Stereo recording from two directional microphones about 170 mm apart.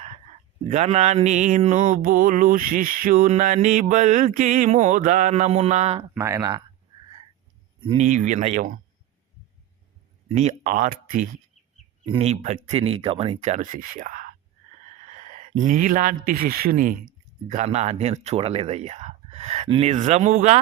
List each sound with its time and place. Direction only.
0.7 s mantra: 40° right (ahead or behind)
6.0 s speech: 15° right (ahead or behind)
7.9 s mantra: 45° right (ahead or behind)
10.3 s mantra: 45° right (ahead or behind)
12.2 s speech: 40° right (ahead or behind)
17.5 s speech: 40° right (ahead or behind)